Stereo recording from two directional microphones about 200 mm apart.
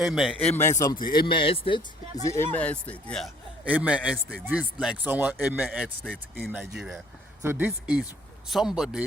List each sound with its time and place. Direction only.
0.0 s a man's voice: centre (ahead or behind)
0.3 s a man's voice: 10° left (ahead or behind); by 1.8 s 25° left (ahead or behind)
2.2 s a man's voice: 15° left (ahead or behind); by 9.0 s 5° right (ahead or behind)